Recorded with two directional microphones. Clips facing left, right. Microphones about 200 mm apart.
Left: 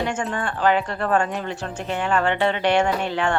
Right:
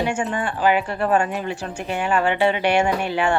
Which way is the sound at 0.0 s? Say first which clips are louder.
Right 2 dB; 10° right (ahead or behind).